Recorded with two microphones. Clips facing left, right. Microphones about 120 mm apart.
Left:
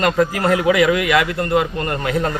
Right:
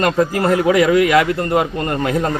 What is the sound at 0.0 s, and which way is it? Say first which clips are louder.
A man's voice: right 1 dB; 30° right (ahead or behind).